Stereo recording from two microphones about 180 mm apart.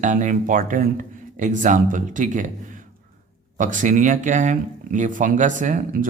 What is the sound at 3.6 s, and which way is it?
Speech, 45° right (ahead or behind).